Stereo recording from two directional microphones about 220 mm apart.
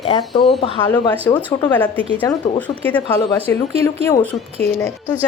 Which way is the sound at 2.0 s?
25° right (ahead or behind).